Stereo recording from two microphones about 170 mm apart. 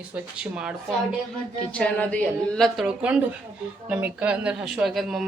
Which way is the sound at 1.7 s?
10° left (ahead or behind).